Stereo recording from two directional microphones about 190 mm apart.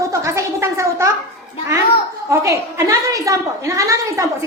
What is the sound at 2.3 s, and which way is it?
A woman's voice, 15° right (ahead or behind).